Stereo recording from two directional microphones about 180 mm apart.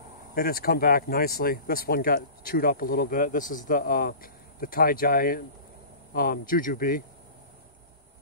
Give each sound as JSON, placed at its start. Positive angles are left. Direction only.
{"t": 0.3, "sound": "speech", "side_deg": 55}